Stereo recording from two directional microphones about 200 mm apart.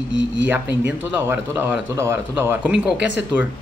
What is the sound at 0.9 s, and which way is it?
Speech, 10° right (ahead or behind).